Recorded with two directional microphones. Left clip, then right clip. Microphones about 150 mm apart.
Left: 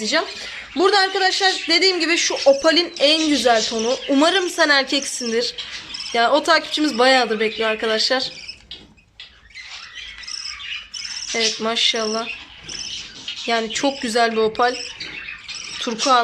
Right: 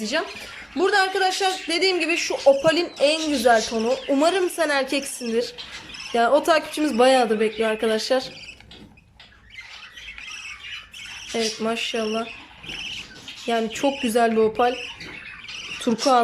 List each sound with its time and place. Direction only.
0.0 s speech: 10° right (ahead or behind)
2.3 s speech: 5° left (ahead or behind)
2.6 s speech: 10° right (ahead or behind)
3.4 s speech: 10° left (ahead or behind)
4.1 s speech: 10° right (ahead or behind)
11.3 s speech: 10° right (ahead or behind)
13.5 s speech: 15° right (ahead or behind)
15.9 s speech: 15° right (ahead or behind)